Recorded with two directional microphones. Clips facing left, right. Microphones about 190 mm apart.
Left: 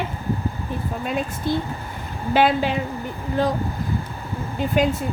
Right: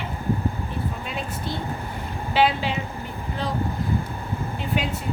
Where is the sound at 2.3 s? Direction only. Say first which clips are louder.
Left 3 dB; 50° left (ahead or behind).